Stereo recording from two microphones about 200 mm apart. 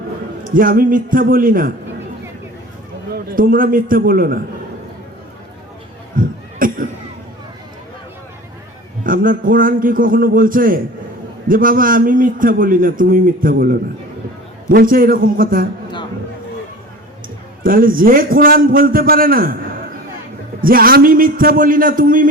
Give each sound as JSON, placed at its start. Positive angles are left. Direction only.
{"t": 0.5, "sound": "a man's voice", "side_deg": -45}
{"t": 3.1, "sound": "a man's voice", "side_deg": -45}
{"t": 6.1, "sound": "a sound", "side_deg": -45}
{"t": 9.0, "sound": "a man's voice", "side_deg": -45}
{"t": 17.6, "sound": "a man's voice", "side_deg": -45}
{"t": 20.6, "sound": "a man's voice", "side_deg": -45}